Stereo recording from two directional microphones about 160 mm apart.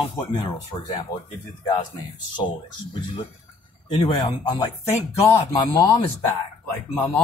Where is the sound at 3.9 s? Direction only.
35° left (ahead or behind).